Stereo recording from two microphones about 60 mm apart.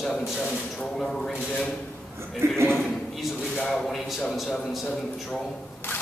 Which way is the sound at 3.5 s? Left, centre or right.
Centre.